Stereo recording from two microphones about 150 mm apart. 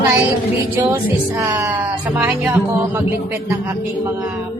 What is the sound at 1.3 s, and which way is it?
Speech, 15° right (ahead or behind).